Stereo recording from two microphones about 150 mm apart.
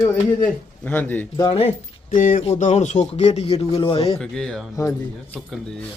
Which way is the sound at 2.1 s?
60° left (ahead or behind).